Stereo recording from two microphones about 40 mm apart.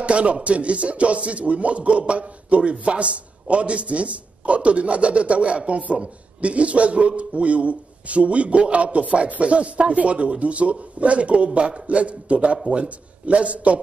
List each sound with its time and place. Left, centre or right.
0.0 s speech: right